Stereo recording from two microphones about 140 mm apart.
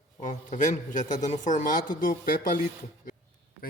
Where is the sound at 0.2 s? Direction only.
65° left (ahead or behind).